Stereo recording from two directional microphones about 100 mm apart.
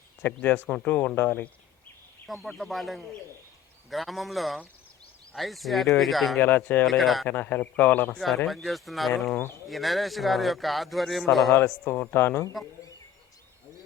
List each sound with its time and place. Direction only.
0.2 s speech: 15° left (ahead or behind)
2.2 s a man's voice: centre (ahead or behind)
6.4 s speech: 15° left (ahead or behind)
6.8 s a man's voice: centre (ahead or behind)
7.3 s speech: 15° left (ahead or behind)
8.4 s a man's voice: centre (ahead or behind)
11.5 s speech: 20° left (ahead or behind)